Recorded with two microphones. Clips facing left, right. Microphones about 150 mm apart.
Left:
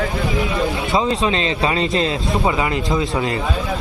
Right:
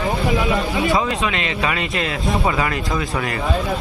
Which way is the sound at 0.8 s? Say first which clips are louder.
Left 2 dB; 25° left (ahead or behind).